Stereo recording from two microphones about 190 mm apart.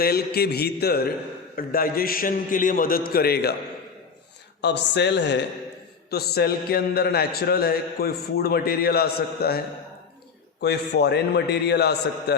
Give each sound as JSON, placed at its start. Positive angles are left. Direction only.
{"t": 0.0, "sound": "a man's voice", "side_deg": 55}
{"t": 4.6, "sound": "a man's voice", "side_deg": 65}
{"t": 10.6, "sound": "a man's voice", "side_deg": 60}